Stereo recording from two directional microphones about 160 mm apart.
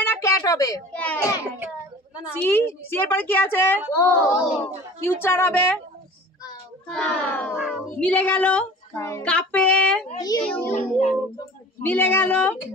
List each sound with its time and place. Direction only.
0.1 s speech: 20° left (ahead or behind)
0.9 s a woman's voice: 10° left (ahead or behind)
2.3 s a woman's voice: 15° left (ahead or behind)
6.9 s a woman's voice: 5° left (ahead or behind)
7.5 s speech: 5° right (ahead or behind)
8.0 s a woman's voice: 10° left (ahead or behind)
10.1 s a child's voice: 25° left (ahead or behind)
10.4 s a woman's voice: 5° left (ahead or behind)
11.8 s a woman's voice: 10° left (ahead or behind)